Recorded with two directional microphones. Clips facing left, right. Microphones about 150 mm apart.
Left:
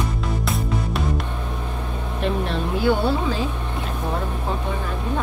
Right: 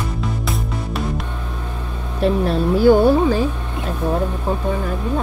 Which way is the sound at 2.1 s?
40° right (ahead or behind).